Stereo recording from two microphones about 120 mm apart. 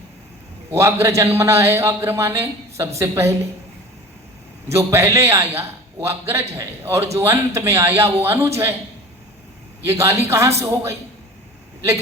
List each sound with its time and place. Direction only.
0.7 s speech: 20° right (ahead or behind)
4.7 s a man's voice: 25° right (ahead or behind)
9.8 s speech: 20° right (ahead or behind)